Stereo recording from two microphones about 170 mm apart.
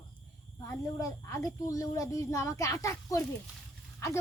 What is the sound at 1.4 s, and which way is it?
Speech, 20° left (ahead or behind).